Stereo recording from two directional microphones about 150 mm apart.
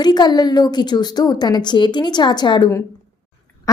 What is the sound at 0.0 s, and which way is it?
A woman's voice, 30° left (ahead or behind).